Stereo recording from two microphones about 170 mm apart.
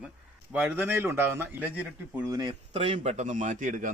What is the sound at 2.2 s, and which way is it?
Speech, 20° right (ahead or behind).